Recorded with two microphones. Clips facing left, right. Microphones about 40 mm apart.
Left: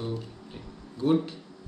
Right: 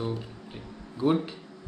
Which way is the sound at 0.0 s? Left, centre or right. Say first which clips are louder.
Right 2 dB; centre.